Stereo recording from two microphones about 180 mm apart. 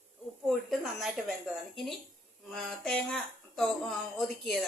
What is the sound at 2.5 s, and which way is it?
Speech, 5° left (ahead or behind).